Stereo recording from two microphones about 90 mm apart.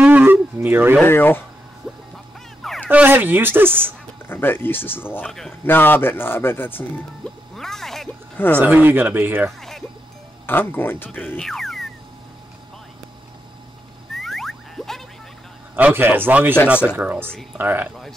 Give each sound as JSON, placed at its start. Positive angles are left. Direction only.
{"t": 0.0, "sound": "wild animals", "side_deg": -20}
{"t": 1.0, "sound": "a man's voice", "side_deg": 25}
{"t": 2.9, "sound": "speech", "side_deg": -20}
{"t": 4.3, "sound": "a man's voice", "side_deg": 25}
{"t": 7.5, "sound": "music", "side_deg": 5}
{"t": 8.5, "sound": "speech", "side_deg": -20}
{"t": 9.6, "sound": "music", "side_deg": 5}
{"t": 10.4, "sound": "a man's voice", "side_deg": 25}
{"t": 11.4, "sound": "a sound", "side_deg": 5}
{"t": 14.1, "sound": "music", "side_deg": 5}
{"t": 15.7, "sound": "speech", "side_deg": -25}
{"t": 17.3, "sound": "speech", "side_deg": 5}
{"t": 17.6, "sound": "speech", "side_deg": -20}